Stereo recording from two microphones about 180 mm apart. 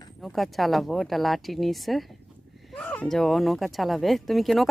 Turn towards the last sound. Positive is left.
turn(degrees=0)  # may be behind; listen again after turning